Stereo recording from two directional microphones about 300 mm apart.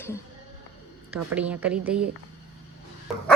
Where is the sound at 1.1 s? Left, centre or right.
Centre.